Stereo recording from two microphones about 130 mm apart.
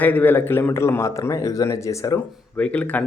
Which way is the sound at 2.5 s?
10° left (ahead or behind).